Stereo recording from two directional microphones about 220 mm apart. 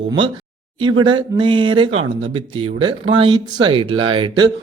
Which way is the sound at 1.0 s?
20° right (ahead or behind).